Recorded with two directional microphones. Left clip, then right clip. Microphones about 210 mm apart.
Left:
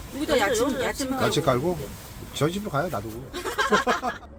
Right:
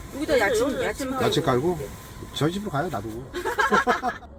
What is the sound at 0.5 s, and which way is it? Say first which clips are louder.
Speech: right 1 dB; 25° left (ahead or behind).